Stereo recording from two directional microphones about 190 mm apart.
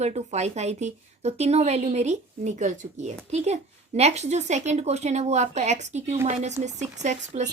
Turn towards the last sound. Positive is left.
turn(degrees=-40)  # may be behind; listen again after turning